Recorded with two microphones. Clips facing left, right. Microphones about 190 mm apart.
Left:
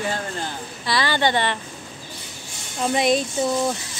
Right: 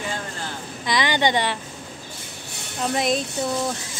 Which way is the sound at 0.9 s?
20° right (ahead or behind).